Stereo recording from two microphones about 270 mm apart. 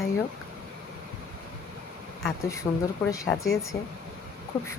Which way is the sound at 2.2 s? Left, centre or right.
Centre.